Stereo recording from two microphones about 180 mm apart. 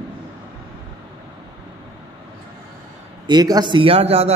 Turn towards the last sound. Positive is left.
turn(degrees=-35)  # may be behind; listen again after turning